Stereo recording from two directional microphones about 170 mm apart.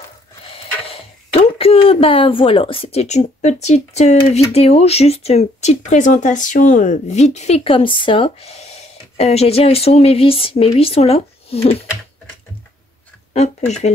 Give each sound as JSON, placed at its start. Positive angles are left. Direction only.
{"t": 1.6, "sound": "speech", "side_deg": 35}
{"t": 13.3, "sound": "speech", "side_deg": 40}